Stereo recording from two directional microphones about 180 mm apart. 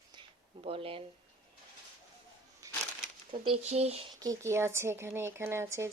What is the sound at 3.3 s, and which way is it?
Speech, 35° right (ahead or behind).